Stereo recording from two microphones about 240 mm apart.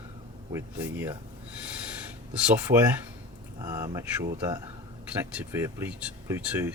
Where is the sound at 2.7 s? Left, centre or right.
Right.